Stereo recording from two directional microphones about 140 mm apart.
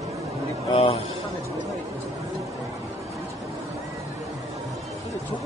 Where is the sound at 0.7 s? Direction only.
40° left (ahead or behind).